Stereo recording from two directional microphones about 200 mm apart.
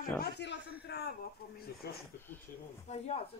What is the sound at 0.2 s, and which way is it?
Speech, 60° left (ahead or behind).